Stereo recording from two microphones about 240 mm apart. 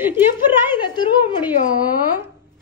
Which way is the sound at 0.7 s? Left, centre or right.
Centre.